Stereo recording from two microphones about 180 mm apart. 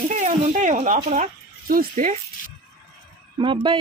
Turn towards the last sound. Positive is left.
turn(degrees=-30)  # may be behind; listen again after turning